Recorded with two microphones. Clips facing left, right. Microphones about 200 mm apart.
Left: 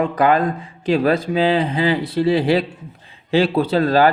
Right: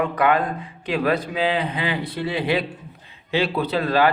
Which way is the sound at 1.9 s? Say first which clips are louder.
Left 9 dB; 40° left (ahead or behind).